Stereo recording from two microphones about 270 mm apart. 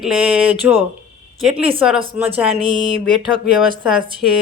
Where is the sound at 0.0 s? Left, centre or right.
Centre.